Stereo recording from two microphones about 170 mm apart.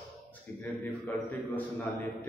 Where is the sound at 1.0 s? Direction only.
10° left (ahead or behind).